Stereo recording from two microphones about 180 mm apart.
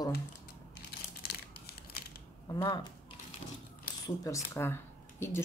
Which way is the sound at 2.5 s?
20° left (ahead or behind).